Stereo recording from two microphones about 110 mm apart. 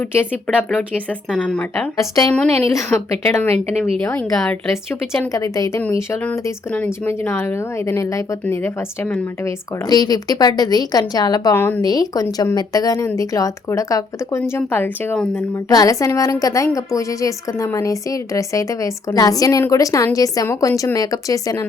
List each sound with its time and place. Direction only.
0.0 s speech: 20° left (ahead or behind)
1.3 s speech: 10° left (ahead or behind)
2.0 s a woman's voice: 35° left (ahead or behind)
4.1 s speech: 10° left (ahead or behind)
5.3 s a woman's voice: 30° left (ahead or behind)
9.8 s a woman's voice: 35° left (ahead or behind)
11.5 s speech: 20° left (ahead or behind)
11.8 s a woman's voice: 35° left (ahead or behind); by 15.6 s 20° left (ahead or behind)
15.7 s a woman's voice: 35° left (ahead or behind)